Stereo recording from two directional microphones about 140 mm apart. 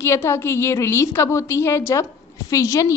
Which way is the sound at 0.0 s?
20° left (ahead or behind).